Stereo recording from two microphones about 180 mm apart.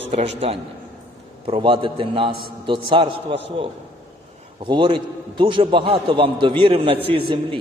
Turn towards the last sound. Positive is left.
turn(degrees=-30)  # may be behind; listen again after turning